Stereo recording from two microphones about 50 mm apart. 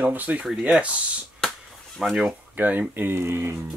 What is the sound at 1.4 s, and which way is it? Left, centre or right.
Chop, centre.